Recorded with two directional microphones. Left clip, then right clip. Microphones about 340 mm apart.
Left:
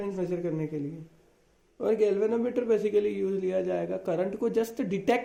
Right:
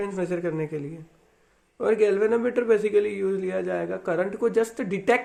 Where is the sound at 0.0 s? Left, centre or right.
Right.